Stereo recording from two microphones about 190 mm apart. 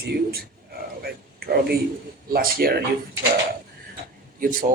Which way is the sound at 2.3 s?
50° right (ahead or behind).